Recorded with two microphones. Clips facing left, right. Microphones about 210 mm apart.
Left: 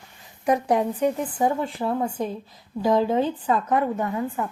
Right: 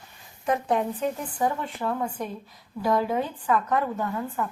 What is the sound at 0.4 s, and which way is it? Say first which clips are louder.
A woman's voice: left 4 dB; 15° left (ahead or behind).